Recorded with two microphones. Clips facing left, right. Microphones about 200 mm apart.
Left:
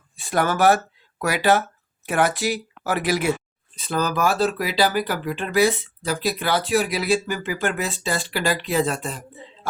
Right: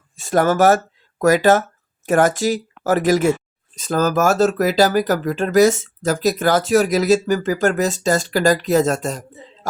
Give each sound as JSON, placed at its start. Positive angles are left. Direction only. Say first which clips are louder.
{"t": 0.2, "sound": "speech", "louder": "right 5 dB", "side_deg": -45}